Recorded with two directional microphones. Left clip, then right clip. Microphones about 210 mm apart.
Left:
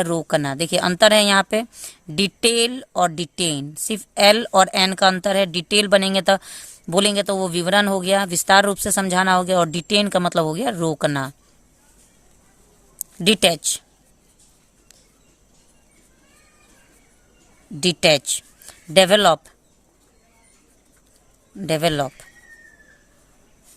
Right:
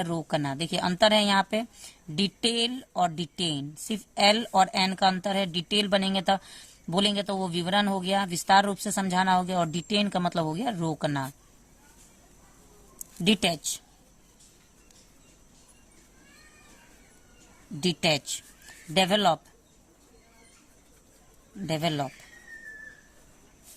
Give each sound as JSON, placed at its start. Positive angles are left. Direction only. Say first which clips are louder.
{"t": 0.0, "sound": "a woman's voice", "louder": "left 9 dB", "side_deg": 40}
{"t": 13.2, "sound": "speech", "louder": "left 9 dB", "side_deg": 40}
{"t": 17.7, "sound": "speech", "louder": "left 10 dB", "side_deg": 45}
{"t": 21.7, "sound": "speech", "louder": "left 9 dB", "side_deg": 45}